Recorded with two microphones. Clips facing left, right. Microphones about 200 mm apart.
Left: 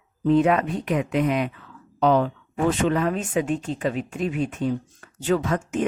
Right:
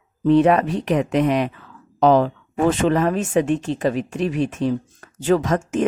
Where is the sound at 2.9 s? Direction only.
40° right (ahead or behind).